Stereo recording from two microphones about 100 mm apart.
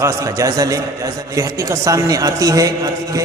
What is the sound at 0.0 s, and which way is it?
A man's voice, 35° right (ahead or behind).